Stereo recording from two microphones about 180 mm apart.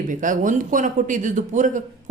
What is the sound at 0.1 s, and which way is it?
A woman's voice, 45° right (ahead or behind).